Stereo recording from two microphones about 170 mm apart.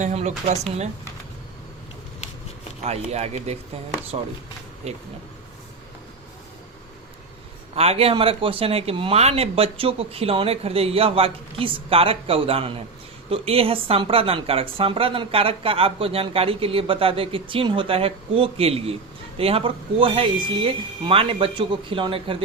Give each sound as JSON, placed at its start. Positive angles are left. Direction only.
{"t": 0.0, "sound": "speech", "side_deg": -40}
{"t": 2.8, "sound": "speech", "side_deg": -40}
{"t": 7.8, "sound": "speech", "side_deg": -35}